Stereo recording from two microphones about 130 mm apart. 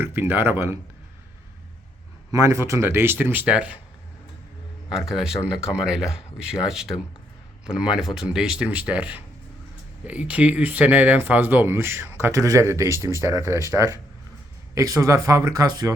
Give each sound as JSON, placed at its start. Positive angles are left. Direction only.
{"t": 0.0, "sound": "speech", "side_deg": -15}
{"t": 2.3, "sound": "speech", "side_deg": -25}
{"t": 4.9, "sound": "speech", "side_deg": 0}